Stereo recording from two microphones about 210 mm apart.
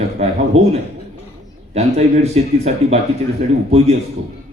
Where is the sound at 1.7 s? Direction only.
30° right (ahead or behind).